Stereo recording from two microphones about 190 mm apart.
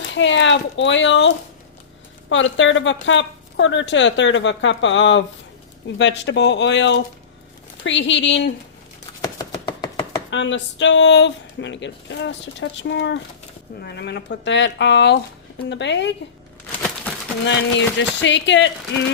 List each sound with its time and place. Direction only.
0.1 s speech: 75° left (ahead or behind)
2.3 s speech: 80° left
9.2 s chopping: 20° left (ahead or behind)
10.2 s speech: 70° left (ahead or behind)
17.4 s speech: 70° left (ahead or behind)